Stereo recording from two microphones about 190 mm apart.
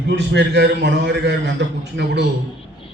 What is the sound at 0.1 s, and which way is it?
A man's voice, 65° right (ahead or behind).